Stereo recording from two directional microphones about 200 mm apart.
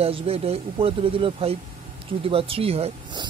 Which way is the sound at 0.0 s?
30° right (ahead or behind).